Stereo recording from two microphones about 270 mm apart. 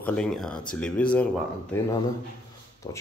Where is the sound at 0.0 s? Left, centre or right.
Centre.